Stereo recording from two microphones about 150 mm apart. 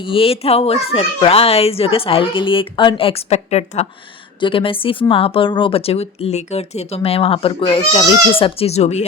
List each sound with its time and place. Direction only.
0.0 s speech: 35° left (ahead or behind)
4.4 s speech: 35° left (ahead or behind)